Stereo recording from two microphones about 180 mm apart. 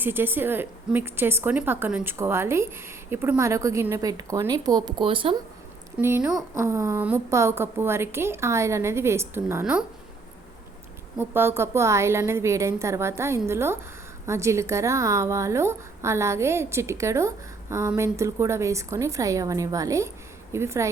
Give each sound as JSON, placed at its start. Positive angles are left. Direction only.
{"t": 0.0, "sound": "a woman's voice", "side_deg": -10}
{"t": 6.0, "sound": "a woman's voice", "side_deg": -10}
{"t": 11.2, "sound": "a woman's voice", "side_deg": -10}